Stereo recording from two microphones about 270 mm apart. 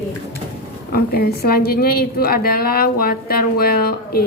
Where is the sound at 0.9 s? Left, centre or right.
Left.